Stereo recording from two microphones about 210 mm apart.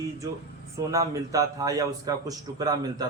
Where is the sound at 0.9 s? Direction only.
15° right (ahead or behind).